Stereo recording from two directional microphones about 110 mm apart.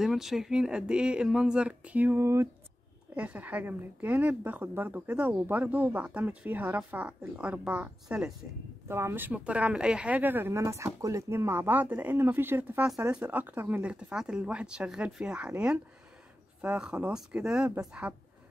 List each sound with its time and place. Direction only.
0.0 s speech: 5° right (ahead or behind); by 2.4 s 25° right (ahead or behind)
3.2 s speech: 15° right (ahead or behind)
8.8 s speech: 25° right (ahead or behind)